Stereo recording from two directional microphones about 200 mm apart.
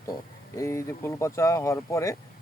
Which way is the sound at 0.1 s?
15° left (ahead or behind).